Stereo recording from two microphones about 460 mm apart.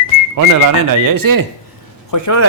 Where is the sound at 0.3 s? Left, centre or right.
Right.